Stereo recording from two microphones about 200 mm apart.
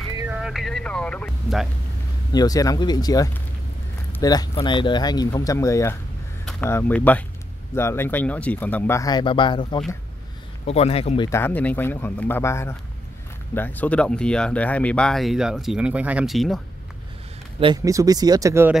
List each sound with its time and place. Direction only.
0.2 s a sound: 5° right (ahead or behind)
2.3 s speech: 20° left (ahead or behind)
11.2 s speech: 10° left (ahead or behind)
17.6 s speech: 20° right (ahead or behind)